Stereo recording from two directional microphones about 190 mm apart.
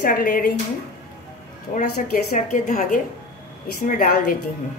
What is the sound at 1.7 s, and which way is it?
A woman's voice, 40° left (ahead or behind).